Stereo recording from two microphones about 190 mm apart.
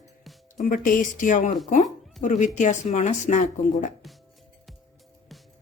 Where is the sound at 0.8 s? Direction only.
45° left (ahead or behind).